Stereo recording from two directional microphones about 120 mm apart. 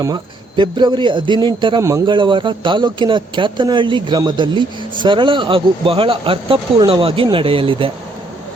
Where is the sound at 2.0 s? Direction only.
45° right (ahead or behind).